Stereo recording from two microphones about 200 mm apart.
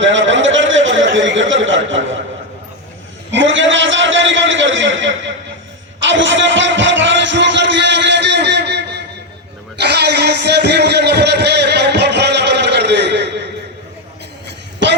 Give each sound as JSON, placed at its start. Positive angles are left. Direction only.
{"t": 0.0, "sound": "a man's voice", "side_deg": -70}
{"t": 3.3, "sound": "a man's voice", "side_deg": -70}
{"t": 9.8, "sound": "a sound", "side_deg": -55}